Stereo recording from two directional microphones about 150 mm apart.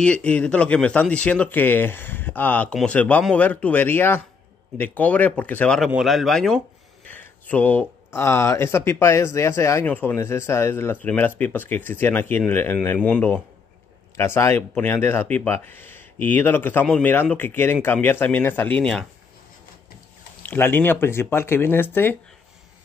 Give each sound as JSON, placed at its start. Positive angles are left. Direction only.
{"t": 0.0, "sound": "speech", "side_deg": 10}
{"t": 20.4, "sound": "speech", "side_deg": 15}